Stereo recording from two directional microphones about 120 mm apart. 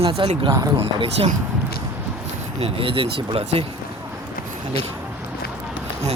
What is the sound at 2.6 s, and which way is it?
Speech, 50° right (ahead or behind).